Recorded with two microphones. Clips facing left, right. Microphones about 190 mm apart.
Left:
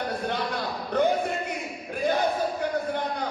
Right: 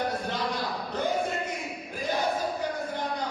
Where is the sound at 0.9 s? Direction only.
60° left (ahead or behind).